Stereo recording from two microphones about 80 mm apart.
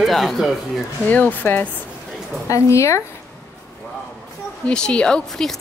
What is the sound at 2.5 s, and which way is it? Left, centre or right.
Speech, left.